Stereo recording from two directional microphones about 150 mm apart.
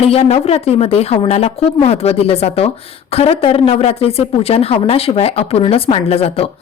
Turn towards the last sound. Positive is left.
turn(degrees=40)  # may be behind; listen again after turning